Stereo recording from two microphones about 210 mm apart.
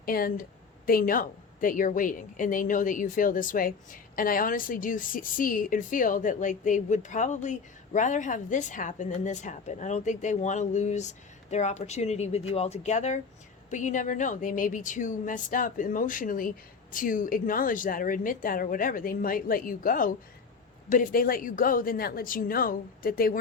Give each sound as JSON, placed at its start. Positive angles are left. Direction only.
{"t": 0.0, "sound": "a woman's voice", "side_deg": 45}